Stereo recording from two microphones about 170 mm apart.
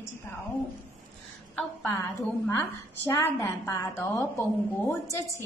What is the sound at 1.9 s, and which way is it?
A woman's voice, 15° left (ahead or behind).